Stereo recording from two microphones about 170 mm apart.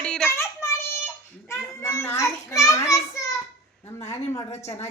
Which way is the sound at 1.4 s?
15° left (ahead or behind).